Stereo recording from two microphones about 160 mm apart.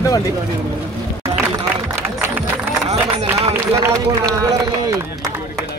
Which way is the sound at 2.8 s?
40° right (ahead or behind).